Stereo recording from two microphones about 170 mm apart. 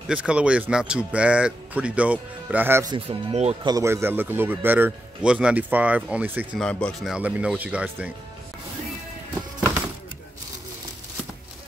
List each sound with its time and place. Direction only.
0.1 s speech: 5° right (ahead or behind)
2.9 s speech: 30° right (ahead or behind)
3.6 s speech: 20° right (ahead or behind)
6.6 s speech: 5° left (ahead or behind)